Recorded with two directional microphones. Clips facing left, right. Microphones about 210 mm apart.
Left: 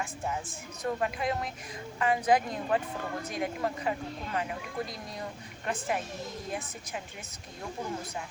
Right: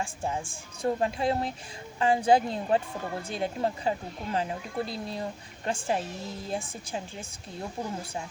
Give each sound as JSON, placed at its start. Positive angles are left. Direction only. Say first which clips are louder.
{"t": 0.0, "sound": "speech", "louder": "right 2 dB", "side_deg": -30}